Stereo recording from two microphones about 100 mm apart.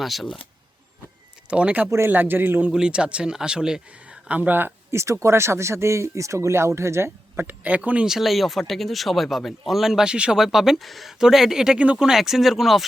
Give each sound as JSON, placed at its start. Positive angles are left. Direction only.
{"t": 0.0, "sound": "speech", "side_deg": 0}
{"t": 1.5, "sound": "a man's voice", "side_deg": -10}